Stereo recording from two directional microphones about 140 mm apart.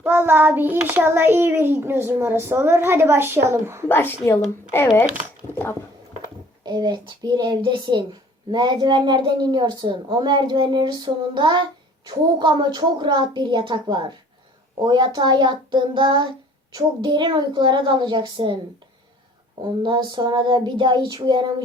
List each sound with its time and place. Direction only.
0.0 s a child's voice: 15° right (ahead or behind)
3.8 s a woman's voice: 15° left (ahead or behind)
6.7 s a woman's voice: 30° right (ahead or behind)
19.8 s a woman's voice: 35° right (ahead or behind)